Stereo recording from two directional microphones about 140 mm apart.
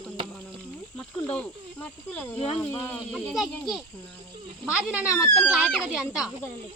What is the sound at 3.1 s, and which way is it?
Speech, centre (ahead or behind).